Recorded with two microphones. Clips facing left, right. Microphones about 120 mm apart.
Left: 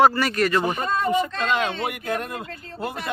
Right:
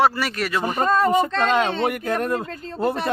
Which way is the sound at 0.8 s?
40° right (ahead or behind).